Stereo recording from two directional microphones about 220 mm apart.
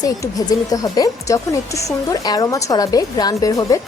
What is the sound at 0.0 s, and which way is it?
Speech, 15° left (ahead or behind).